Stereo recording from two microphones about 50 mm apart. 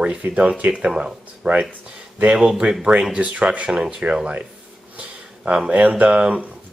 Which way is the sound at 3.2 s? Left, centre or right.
Right.